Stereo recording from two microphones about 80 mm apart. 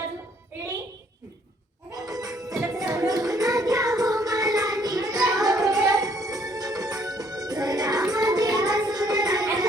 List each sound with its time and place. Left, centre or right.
1.9 s a sound: right
2.4 s music: centre
3.1 s music: right
8.1 s child singing: right